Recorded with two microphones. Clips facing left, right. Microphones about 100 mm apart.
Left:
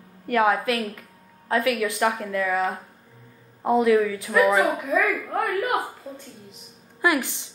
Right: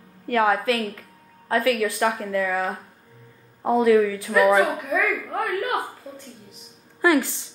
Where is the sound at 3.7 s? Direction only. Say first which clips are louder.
Right 1 dB; 20° left (ahead or behind).